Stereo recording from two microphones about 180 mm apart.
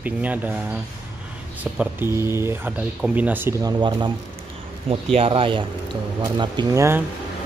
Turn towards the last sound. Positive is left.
turn(degrees=-15)  # may be behind; listen again after turning